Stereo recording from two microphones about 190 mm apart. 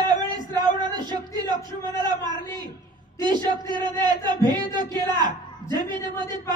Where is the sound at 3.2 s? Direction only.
20° right (ahead or behind).